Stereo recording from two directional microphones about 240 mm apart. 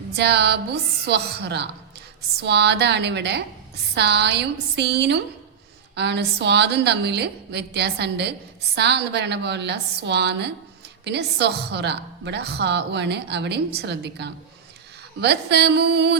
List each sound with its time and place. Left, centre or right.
0.2 s a woman's voice: right